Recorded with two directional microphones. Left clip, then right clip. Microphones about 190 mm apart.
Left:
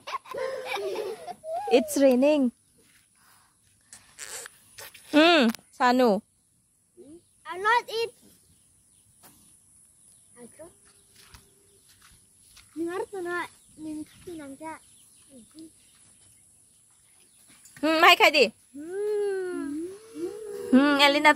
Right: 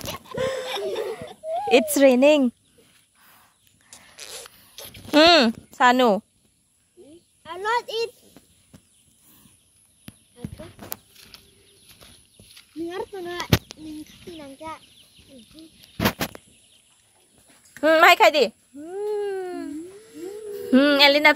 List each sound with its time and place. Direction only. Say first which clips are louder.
0.4 s a sound: right 8 dB; 20° right (ahead or behind)
0.7 s laughter: right 3 dB; 45° left (ahead or behind)
1.6 s speech: right 5 dB; 5° right (ahead or behind)
3.2 s a sound: right 6 dB; 5° right (ahead or behind)
5.1 s speech: right 5 dB; 5° left (ahead or behind)
7.4 s a child's voice: left 1 dB; 35° left (ahead or behind)
12.8 s speech: even; centre (ahead or behind)
17.7 s speech: right 4 dB; 10° left (ahead or behind)